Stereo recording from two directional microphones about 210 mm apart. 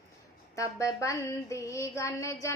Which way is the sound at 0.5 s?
15° left (ahead or behind).